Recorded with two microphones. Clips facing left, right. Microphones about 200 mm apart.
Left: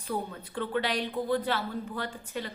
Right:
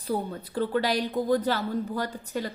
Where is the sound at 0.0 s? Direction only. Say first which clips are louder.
Right 4 dB; 35° right (ahead or behind).